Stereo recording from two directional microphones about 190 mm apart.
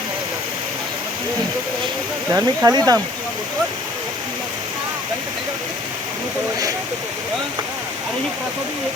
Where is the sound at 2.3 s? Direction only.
20° right (ahead or behind).